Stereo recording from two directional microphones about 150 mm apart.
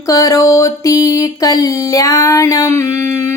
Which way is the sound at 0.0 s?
20° left (ahead or behind).